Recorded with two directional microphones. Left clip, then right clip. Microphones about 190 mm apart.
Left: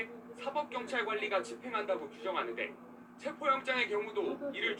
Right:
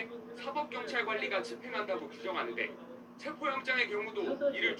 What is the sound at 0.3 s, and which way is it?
A man's voice, 15° right (ahead or behind).